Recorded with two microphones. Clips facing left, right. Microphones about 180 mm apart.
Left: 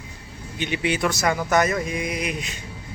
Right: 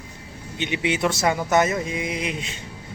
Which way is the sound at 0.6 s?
20° right (ahead or behind).